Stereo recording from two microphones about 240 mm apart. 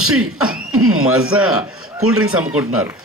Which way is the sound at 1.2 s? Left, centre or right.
Right.